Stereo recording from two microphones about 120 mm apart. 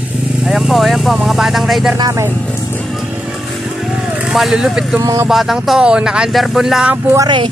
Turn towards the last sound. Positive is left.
turn(degrees=-40)  # may be behind; listen again after turning